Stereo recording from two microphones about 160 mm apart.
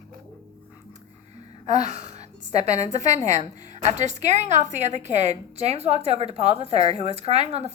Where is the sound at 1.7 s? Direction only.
45° right (ahead or behind).